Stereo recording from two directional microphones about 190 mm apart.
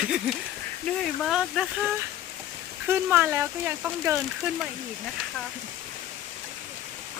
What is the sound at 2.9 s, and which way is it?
Speech, 10° right (ahead or behind).